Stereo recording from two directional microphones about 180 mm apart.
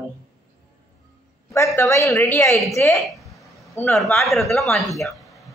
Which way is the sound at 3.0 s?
Centre (ahead or behind).